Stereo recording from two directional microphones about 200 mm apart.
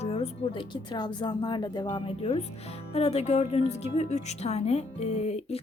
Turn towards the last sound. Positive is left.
turn(degrees=30)  # may be behind; listen again after turning